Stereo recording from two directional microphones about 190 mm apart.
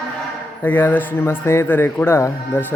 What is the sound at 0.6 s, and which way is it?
Speech, 10° left (ahead or behind).